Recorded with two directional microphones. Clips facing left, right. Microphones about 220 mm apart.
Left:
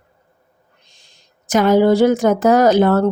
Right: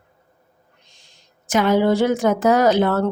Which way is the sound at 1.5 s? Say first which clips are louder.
Left 4 dB; 40° left (ahead or behind).